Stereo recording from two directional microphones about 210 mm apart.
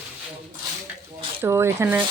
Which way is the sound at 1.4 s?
10° right (ahead or behind).